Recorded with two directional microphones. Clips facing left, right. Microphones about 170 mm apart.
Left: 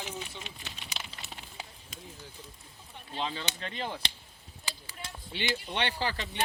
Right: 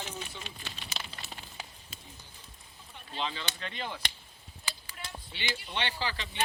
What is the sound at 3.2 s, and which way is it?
Speech, 40° left (ahead or behind).